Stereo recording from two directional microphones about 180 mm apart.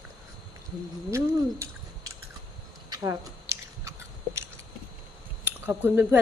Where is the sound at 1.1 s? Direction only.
15° right (ahead or behind).